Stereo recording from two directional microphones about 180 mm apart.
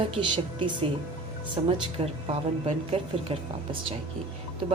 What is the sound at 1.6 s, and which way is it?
A woman's voice, 30° right (ahead or behind).